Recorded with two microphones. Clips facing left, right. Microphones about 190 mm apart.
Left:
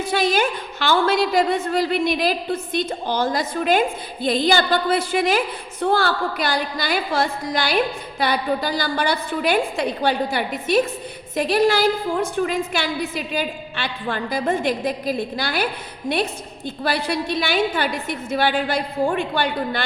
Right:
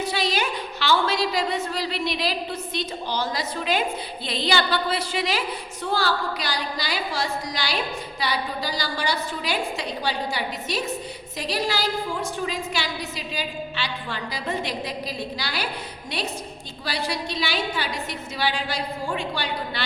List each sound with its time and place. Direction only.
0.0 s a woman's voice: 50° left (ahead or behind)